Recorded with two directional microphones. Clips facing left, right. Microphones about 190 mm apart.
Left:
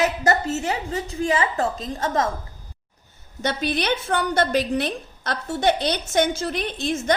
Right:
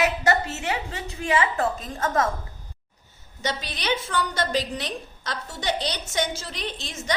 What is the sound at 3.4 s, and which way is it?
A woman's voice, 55° left (ahead or behind).